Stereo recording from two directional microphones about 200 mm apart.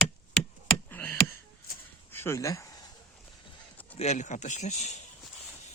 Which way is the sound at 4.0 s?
35° left (ahead or behind).